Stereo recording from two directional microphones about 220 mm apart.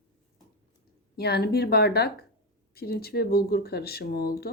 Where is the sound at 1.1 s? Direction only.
45° left (ahead or behind).